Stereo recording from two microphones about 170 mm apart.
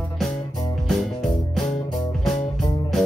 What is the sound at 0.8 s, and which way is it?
Music, centre (ahead or behind).